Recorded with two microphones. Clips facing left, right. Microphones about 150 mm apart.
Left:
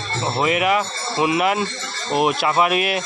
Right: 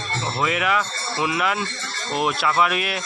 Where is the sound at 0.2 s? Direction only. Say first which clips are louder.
Left 5 dB; 20° left (ahead or behind).